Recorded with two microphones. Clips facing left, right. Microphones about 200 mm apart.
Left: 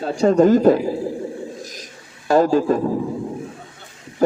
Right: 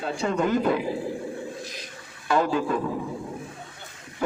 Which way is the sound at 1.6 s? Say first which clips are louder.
Left 3 dB; 40° left (ahead or behind).